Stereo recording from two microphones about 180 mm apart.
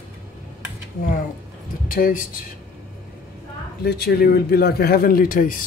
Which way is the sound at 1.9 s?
50° left (ahead or behind).